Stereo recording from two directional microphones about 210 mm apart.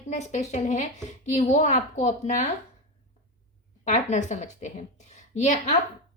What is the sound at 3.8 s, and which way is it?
A woman's voice, 35° left (ahead or behind).